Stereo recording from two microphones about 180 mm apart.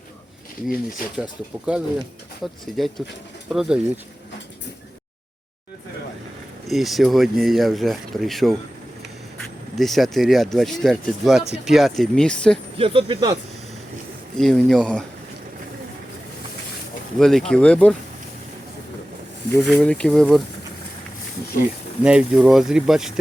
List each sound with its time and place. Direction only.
1.2 s speech: 5° right (ahead or behind)
6.7 s speech: centre (ahead or behind)
9.7 s speech: centre (ahead or behind)
12.7 s speech: 30° right (ahead or behind)
14.3 s speech: 5° left (ahead or behind)
17.2 s speech: centre (ahead or behind)
19.6 s speech: 5° left (ahead or behind)
22.0 s speech: 5° right (ahead or behind)